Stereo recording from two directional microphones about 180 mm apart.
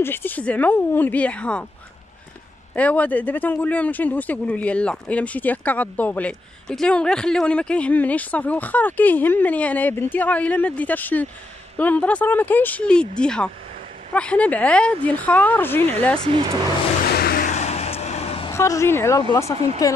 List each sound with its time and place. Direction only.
0.0 s speech: 10° left (ahead or behind)
2.7 s speech: 10° left (ahead or behind)
16.2 s speech: 30° right (ahead or behind)
17.1 s vehicle: 60° left (ahead or behind)
17.5 s vehicle: 40° left (ahead or behind)
18.5 s speech: 15° left (ahead or behind)
19.5 s speech: 35° right (ahead or behind)